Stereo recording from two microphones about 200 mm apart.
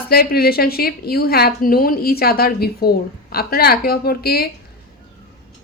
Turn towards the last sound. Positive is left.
turn(degrees=50)  # may be behind; listen again after turning